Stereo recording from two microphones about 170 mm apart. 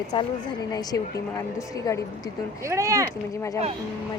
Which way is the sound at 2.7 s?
20° right (ahead or behind).